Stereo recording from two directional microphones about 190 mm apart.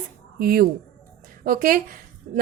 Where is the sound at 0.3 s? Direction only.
50° right (ahead or behind).